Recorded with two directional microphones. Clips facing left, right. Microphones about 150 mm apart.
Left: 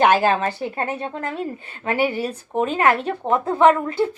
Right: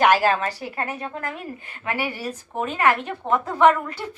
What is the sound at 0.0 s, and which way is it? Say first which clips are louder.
A woman's voice: left 2 dB; 25° left (ahead or behind).